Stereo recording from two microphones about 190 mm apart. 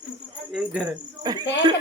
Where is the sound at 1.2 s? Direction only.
20° right (ahead or behind).